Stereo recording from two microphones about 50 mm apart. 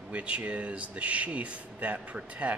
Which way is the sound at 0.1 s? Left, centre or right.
Right.